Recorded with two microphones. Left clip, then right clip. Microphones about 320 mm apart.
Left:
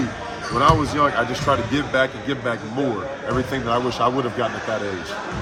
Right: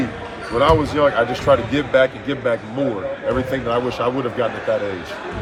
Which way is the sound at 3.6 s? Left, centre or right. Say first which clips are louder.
Left 2 dB; centre.